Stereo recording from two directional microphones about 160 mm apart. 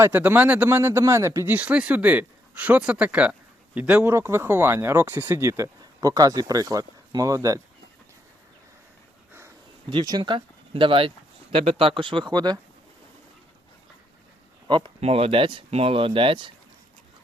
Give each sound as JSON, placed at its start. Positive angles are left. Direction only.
{"t": 0.0, "sound": "speech", "side_deg": -15}
{"t": 9.9, "sound": "speech", "side_deg": -25}
{"t": 14.7, "sound": "speech", "side_deg": -30}